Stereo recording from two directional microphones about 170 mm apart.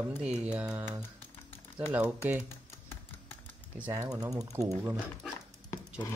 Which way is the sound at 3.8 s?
15° right (ahead or behind).